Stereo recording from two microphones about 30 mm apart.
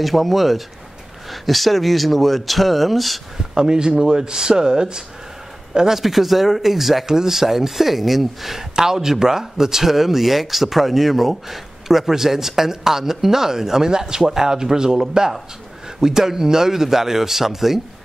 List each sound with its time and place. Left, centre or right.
0.0 s speech: centre
3.5 s speech: right
5.8 s speech: centre
8.7 s speech: centre